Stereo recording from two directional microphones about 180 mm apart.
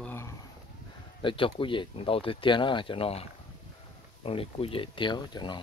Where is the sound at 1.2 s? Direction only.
30° left (ahead or behind).